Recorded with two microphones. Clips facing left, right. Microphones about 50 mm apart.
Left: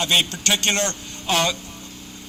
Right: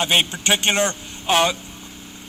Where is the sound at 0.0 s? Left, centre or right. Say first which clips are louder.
Right 1 dB; right.